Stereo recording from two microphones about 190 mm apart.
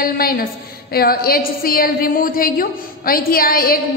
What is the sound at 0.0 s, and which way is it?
A woman's voice, 50° left (ahead or behind).